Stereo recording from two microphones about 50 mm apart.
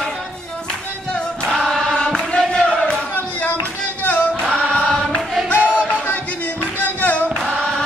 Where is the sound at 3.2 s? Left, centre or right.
Left.